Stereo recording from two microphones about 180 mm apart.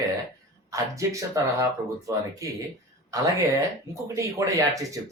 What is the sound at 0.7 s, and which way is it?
Speech, 15° right (ahead or behind).